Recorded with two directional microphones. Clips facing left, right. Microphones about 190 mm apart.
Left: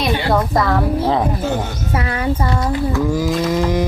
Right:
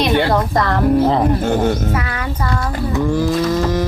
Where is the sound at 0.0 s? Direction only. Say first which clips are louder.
Right 2 dB; centre (ahead or behind).